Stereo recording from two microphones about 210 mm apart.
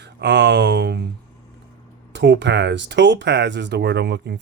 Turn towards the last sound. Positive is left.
turn(degrees=-50)  # may be behind; listen again after turning